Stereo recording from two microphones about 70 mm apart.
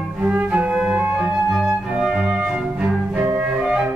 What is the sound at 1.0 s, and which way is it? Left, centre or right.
Music, centre.